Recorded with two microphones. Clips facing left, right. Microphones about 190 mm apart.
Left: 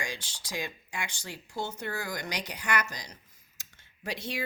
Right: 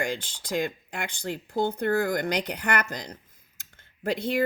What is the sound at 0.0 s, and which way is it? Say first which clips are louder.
Speech: right 9 dB; 55° right (ahead or behind).